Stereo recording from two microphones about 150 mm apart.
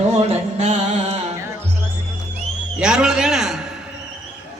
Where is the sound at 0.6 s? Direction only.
45° right (ahead or behind).